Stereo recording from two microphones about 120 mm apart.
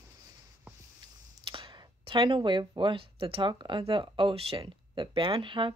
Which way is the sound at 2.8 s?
45° right (ahead or behind).